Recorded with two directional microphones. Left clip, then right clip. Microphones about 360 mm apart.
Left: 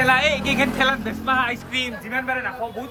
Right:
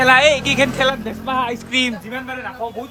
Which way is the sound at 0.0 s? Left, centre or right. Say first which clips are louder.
Right 6 dB; centre.